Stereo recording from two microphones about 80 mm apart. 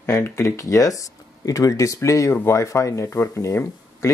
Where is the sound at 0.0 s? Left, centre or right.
Left.